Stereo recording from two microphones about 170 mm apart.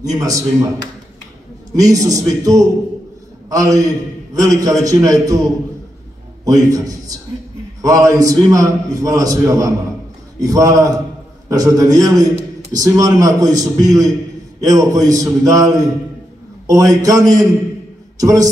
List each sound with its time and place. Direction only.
0.2 s a man's voice: 20° right (ahead or behind)
1.8 s a man's voice: 20° right (ahead or behind)
6.4 s a man's voice: 20° right (ahead or behind)